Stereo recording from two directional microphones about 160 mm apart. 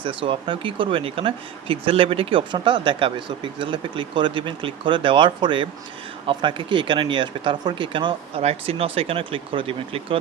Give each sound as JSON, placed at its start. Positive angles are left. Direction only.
{"t": 0.2, "sound": "speech", "side_deg": -30}